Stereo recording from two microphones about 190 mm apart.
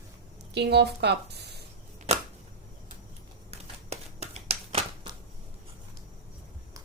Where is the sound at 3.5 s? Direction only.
35° right (ahead or behind).